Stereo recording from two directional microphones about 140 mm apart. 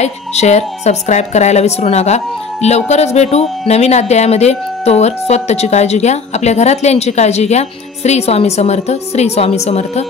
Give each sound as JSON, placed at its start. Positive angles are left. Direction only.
{"t": 0.0, "sound": "speech", "side_deg": 50}